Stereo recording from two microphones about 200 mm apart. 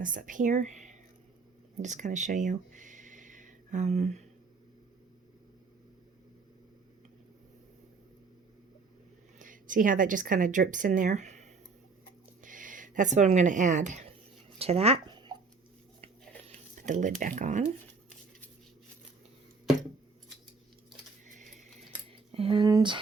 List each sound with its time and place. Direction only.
0.0 s speech: 40° right (ahead or behind)
1.8 s a sound: 40° right (ahead or behind)
9.4 s speech: 40° right (ahead or behind)
14.6 s zipper: 30° right (ahead or behind)
16.7 s speech: 40° right (ahead or behind)
21.2 s a sound: 35° right (ahead or behind)
22.3 s speech: 30° right (ahead or behind)